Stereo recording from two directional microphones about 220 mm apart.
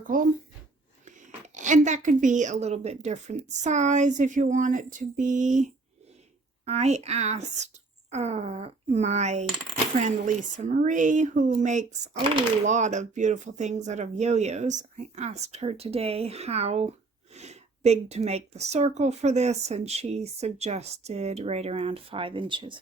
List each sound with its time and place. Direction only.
0.0 s speech: 40° right (ahead or behind); by 22.8 s 20° right (ahead or behind)